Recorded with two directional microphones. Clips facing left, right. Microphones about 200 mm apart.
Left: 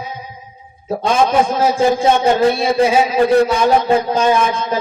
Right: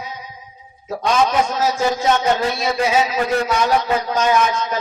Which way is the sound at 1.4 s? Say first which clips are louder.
Left 4 dB; 55° left (ahead or behind).